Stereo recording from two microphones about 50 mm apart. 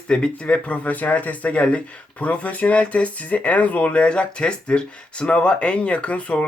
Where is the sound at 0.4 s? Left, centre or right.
Left.